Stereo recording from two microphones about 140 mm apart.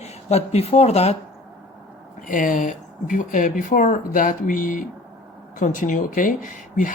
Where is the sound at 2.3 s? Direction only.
70° left (ahead or behind).